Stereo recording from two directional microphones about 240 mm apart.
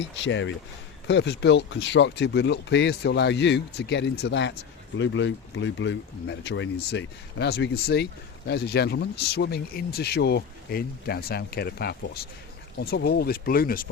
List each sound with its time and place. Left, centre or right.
0.1 s speech: left